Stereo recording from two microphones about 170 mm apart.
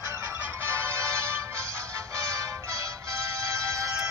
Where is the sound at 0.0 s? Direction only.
15° right (ahead or behind).